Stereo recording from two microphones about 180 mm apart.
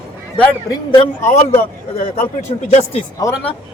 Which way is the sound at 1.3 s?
45° left (ahead or behind).